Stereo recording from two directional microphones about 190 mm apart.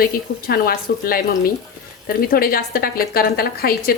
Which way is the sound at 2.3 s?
50° left (ahead or behind).